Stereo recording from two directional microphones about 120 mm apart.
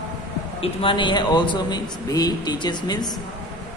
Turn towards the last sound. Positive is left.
turn(degrees=35)  # may be behind; listen again after turning